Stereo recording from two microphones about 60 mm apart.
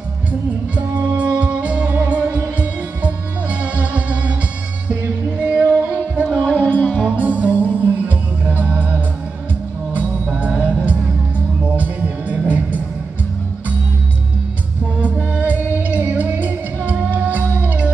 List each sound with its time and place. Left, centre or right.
0.3 s music: right
6.6 s music: left
7.2 s music: right
10.2 s music: centre
15.0 s music: right